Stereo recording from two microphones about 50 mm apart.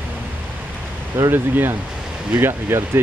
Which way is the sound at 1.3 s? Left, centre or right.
Right.